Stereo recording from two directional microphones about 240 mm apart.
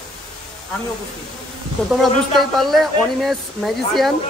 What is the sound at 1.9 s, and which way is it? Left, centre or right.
Speech, centre.